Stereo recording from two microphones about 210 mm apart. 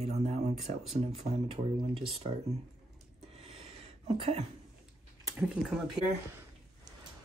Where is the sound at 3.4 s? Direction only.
25° right (ahead or behind).